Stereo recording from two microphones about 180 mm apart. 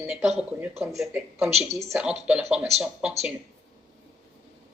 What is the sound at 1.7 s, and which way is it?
Speech, 15° right (ahead or behind).